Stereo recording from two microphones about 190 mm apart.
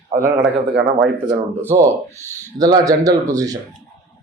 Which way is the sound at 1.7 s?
15° right (ahead or behind).